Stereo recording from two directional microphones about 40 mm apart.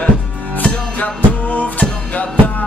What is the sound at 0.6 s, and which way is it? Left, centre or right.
Music, left.